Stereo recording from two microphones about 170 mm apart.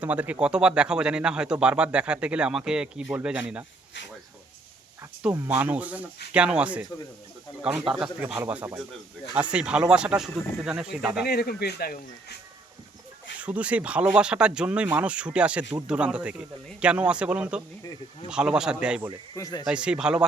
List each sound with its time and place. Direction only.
0.0 s speech: 10° right (ahead or behind)
5.2 s speech: 10° right (ahead or behind)
11.3 s speech: 70° left (ahead or behind)
13.4 s speech: 10° right (ahead or behind)
17.8 s speech: 25° left (ahead or behind)
18.3 s speech: 5° right (ahead or behind)
19.3 s speech: 20° left (ahead or behind)
19.6 s speech: 5° right (ahead or behind)